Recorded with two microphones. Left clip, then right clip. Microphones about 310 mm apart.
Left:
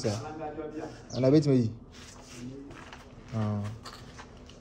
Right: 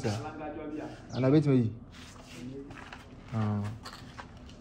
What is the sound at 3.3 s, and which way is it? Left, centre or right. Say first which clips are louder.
Speech: even; centre.